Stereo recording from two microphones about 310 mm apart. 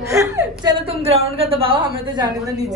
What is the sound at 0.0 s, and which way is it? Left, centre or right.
Whimper, centre.